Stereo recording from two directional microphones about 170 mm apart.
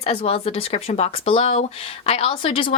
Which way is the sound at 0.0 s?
35° left (ahead or behind).